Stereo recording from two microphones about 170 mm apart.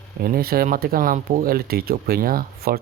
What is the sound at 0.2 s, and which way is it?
Speech, 60° right (ahead or behind).